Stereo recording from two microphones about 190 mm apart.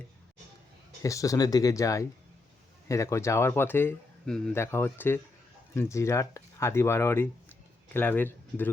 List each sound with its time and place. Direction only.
1.0 s speech: 15° left (ahead or behind)